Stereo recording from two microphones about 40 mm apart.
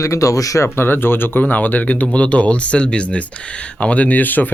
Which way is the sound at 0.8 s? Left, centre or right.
Left.